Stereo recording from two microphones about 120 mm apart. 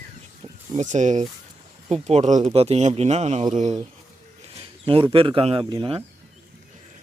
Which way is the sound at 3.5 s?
80° right.